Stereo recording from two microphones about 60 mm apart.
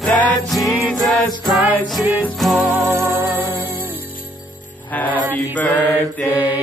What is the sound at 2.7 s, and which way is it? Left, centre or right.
Music, right.